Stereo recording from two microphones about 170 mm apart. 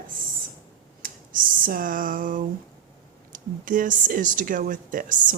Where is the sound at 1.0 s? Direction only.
55° right (ahead or behind).